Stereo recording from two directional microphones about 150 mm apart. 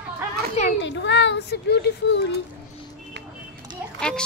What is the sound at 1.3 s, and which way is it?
Speech, 90° left.